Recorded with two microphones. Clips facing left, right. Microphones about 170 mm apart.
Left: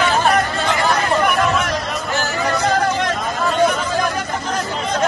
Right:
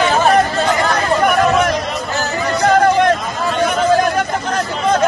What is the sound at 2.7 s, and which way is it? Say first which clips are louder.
Hubbub: right 10 dB; 55° right (ahead or behind).